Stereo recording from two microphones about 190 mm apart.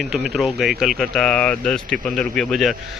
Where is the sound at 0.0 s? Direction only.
Centre (ahead or behind).